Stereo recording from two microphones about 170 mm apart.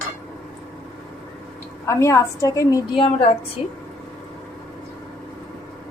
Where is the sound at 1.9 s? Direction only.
15° left (ahead or behind).